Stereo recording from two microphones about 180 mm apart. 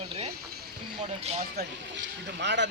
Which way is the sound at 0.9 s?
30° right (ahead or behind).